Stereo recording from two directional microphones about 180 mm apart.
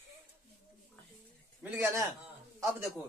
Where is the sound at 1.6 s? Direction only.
10° right (ahead or behind).